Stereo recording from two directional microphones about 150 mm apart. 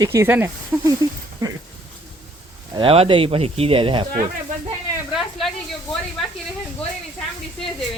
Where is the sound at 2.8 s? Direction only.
35° right (ahead or behind).